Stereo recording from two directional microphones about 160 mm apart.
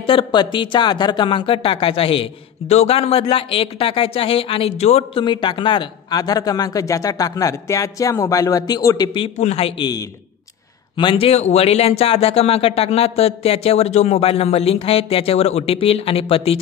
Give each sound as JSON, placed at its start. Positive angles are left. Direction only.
{"t": 0.0, "sound": "speech", "side_deg": 35}
{"t": 9.8, "sound": "speech", "side_deg": 25}